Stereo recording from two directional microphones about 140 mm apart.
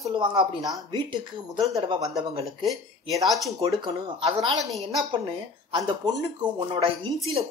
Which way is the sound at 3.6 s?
30° right (ahead or behind).